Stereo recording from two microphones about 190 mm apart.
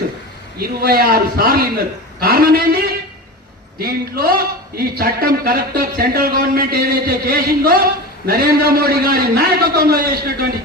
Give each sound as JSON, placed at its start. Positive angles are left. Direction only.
{"t": 0.8, "sound": "a man's voice", "side_deg": -50}